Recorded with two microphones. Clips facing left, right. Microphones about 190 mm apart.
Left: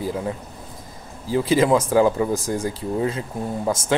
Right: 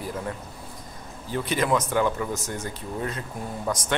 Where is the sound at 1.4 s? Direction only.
25° left (ahead or behind).